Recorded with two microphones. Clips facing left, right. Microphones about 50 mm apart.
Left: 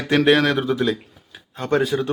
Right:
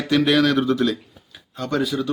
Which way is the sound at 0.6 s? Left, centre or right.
Centre.